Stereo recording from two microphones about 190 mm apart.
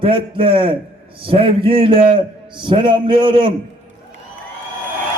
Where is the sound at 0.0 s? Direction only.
30° right (ahead or behind).